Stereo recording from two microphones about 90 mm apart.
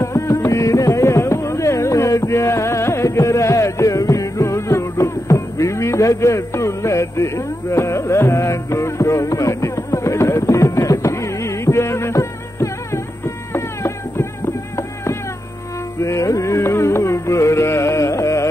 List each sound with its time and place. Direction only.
0.0 s music: 35° left (ahead or behind)